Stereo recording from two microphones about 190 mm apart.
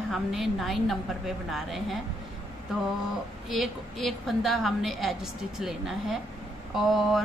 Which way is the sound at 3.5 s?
Centre (ahead or behind).